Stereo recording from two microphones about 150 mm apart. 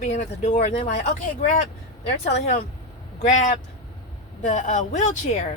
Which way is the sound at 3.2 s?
55° left (ahead or behind).